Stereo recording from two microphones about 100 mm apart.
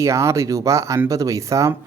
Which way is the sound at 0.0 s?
30° right (ahead or behind).